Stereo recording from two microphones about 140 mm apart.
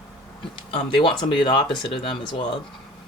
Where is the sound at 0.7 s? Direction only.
35° left (ahead or behind).